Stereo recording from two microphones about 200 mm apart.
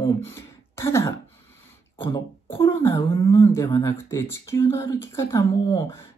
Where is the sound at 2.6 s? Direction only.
15° left (ahead or behind).